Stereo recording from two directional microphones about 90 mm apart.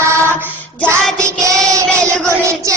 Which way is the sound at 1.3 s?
35° right (ahead or behind).